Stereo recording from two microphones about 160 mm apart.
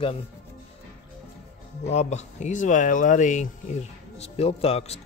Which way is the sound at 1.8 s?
45° left (ahead or behind).